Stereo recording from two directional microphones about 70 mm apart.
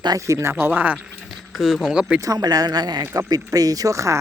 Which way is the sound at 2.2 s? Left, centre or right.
Right.